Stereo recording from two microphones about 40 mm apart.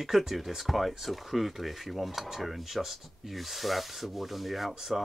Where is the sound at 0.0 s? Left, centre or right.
Centre.